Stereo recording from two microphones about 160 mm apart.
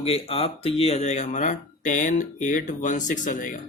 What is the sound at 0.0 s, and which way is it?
Speech, 35° left (ahead or behind).